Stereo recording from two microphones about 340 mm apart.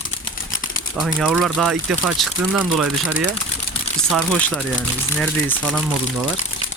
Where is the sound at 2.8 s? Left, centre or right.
Right.